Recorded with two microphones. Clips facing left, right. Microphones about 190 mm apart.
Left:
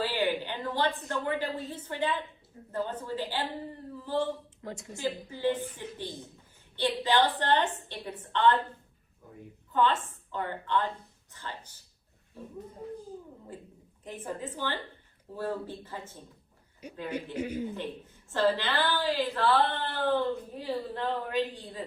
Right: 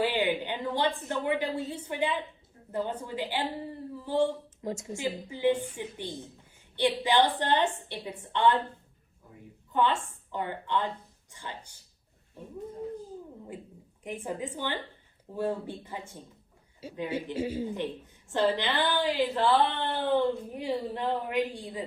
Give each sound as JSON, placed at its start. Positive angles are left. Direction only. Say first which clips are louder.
{"t": 0.0, "sound": "a woman's voice", "louder": "right 2 dB", "side_deg": -15}
{"t": 4.6, "sound": "a woman's voice", "louder": "right 2 dB", "side_deg": -25}
{"t": 9.7, "sound": "a woman's voice", "louder": "even", "side_deg": -15}
{"t": 14.0, "sound": "a woman's voice", "louder": "right 3 dB", "side_deg": -15}